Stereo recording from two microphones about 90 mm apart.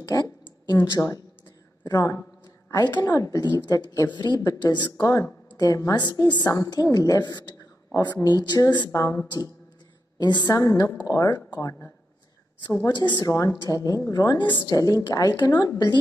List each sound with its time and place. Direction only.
0.0 s a sound: 45° left (ahead or behind)
1.0 s speech: 15° left (ahead or behind)
1.9 s a woman's voice: 40° left (ahead or behind)
4.1 s a woman's voice: 55° left (ahead or behind)
5.0 s speech: 40° left (ahead or behind)
6.0 s a woman's voice: 55° left (ahead or behind)
6.5 s a woman's voice: 45° left (ahead or behind)
8.9 s speech: 35° left (ahead or behind)
10.1 s a woman's voice: 55° left (ahead or behind)
12.8 s a woman's voice: 55° left (ahead or behind)
13.3 s a woman's voice: 35° left (ahead or behind); by 14.6 s 50° left (ahead or behind)
14.7 s a woman's voice: 40° left (ahead or behind)